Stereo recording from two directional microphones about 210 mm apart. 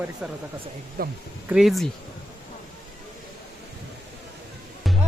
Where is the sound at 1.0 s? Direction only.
45° right (ahead or behind).